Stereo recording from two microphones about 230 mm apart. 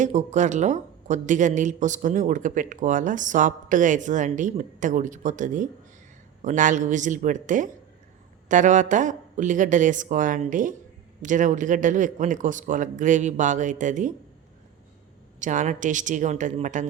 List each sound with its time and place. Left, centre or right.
0.0 s speech: right
15.4 s speech: right